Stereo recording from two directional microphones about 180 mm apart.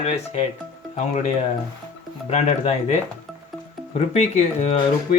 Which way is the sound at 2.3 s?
35° left (ahead or behind).